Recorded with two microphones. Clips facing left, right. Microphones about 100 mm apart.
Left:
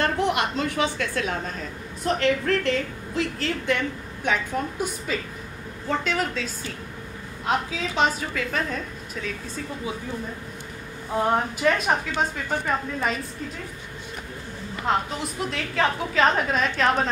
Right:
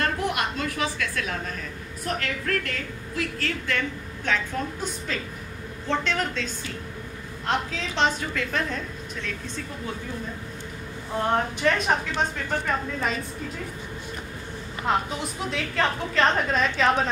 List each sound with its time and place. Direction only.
0.2 s a woman's voice: 25° left (ahead or behind); by 9.3 s 5° left (ahead or behind)
11.1 s a woman's voice: 5° left (ahead or behind)
14.8 s a woman's voice: centre (ahead or behind)